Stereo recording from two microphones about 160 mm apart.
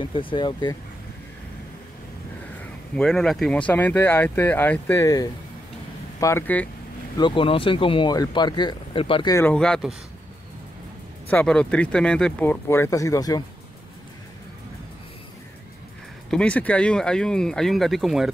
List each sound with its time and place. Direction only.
0.0 s speech: 30° left (ahead or behind)
2.6 s speech: 5° left (ahead or behind)
7.2 s speech: 30° left (ahead or behind)
9.3 s speech: 10° left (ahead or behind)
11.2 s speech: 5° left (ahead or behind)
16.3 s speech: 5° left (ahead or behind)